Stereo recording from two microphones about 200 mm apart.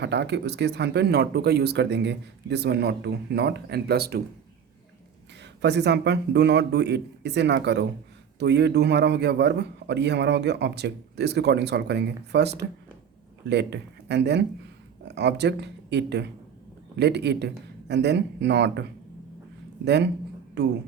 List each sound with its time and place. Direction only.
0.0 s a man's voice: 60° right (ahead or behind)
5.6 s a man's voice: 60° right (ahead or behind)